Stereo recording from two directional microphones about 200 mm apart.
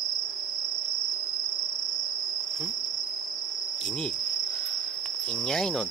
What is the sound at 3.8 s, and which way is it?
Insect, 5° left (ahead or behind).